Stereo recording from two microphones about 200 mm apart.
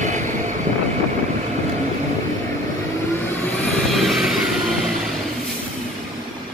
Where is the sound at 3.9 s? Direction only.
Centre (ahead or behind).